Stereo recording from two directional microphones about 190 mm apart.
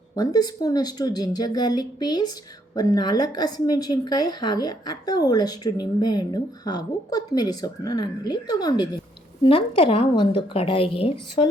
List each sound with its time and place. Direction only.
0.2 s a woman's voice: 20° left (ahead or behind)